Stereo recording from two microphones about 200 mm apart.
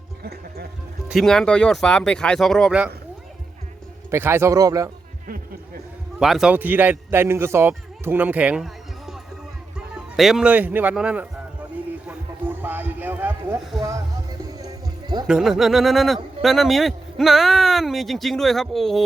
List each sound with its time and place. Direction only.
0.2 s speech: 55° right (ahead or behind)
1.0 s a man's voice: centre (ahead or behind)
4.1 s a man's voice: 10° right (ahead or behind)
6.1 s a man's voice: centre (ahead or behind)
12.0 s a sound: 10° right (ahead or behind)
14.6 s music: 20° right (ahead or behind)
15.3 s a man's voice: centre (ahead or behind)